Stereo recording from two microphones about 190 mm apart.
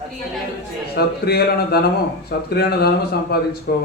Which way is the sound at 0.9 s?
55° left (ahead or behind).